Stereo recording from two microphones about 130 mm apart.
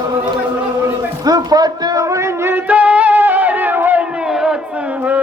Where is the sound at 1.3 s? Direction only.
30° right (ahead or behind); by 4.6 s 5° right (ahead or behind).